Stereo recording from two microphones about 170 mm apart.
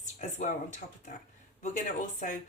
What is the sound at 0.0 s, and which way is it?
Speech, 45° left (ahead or behind).